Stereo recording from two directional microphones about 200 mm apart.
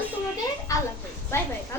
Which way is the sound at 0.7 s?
15° left (ahead or behind).